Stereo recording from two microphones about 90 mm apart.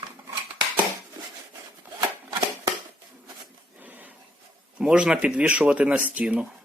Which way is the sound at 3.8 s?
20° right (ahead or behind).